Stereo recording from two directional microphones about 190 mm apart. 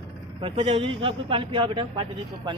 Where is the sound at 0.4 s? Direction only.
25° right (ahead or behind).